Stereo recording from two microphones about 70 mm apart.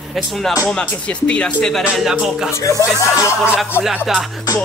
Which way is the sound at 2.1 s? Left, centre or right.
Centre.